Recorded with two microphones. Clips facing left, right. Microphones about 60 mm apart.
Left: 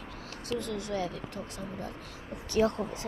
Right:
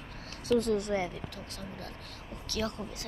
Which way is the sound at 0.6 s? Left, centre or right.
Right.